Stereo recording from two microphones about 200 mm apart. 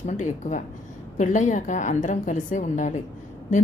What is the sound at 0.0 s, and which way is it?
A woman's voice, 40° left (ahead or behind).